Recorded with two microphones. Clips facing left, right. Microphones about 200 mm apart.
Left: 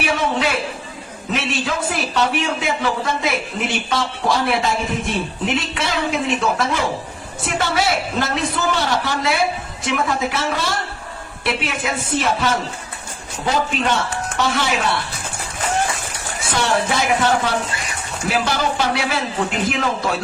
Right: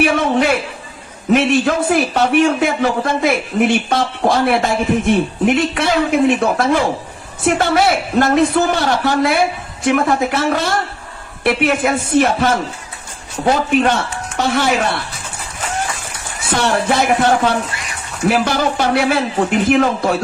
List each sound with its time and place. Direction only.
0.0 s a man's voice: 55° right (ahead or behind)
16.4 s a man's voice: 55° right (ahead or behind)